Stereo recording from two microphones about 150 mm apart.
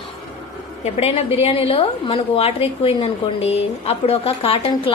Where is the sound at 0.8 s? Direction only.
45° left (ahead or behind).